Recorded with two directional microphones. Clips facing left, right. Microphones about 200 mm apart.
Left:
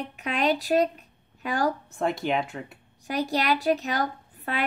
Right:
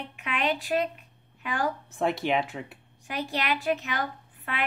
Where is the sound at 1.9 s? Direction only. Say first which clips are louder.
Even; centre (ahead or behind).